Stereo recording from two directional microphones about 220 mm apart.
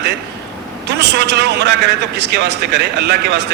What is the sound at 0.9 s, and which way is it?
A man's voice, 50° right (ahead or behind).